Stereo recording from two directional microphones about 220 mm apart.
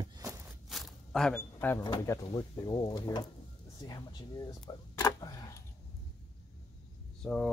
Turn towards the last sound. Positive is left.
turn(degrees=0)  # may be behind; listen again after turning